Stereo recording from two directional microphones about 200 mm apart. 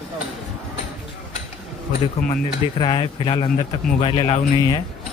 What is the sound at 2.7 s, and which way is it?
Speech, 25° left (ahead or behind).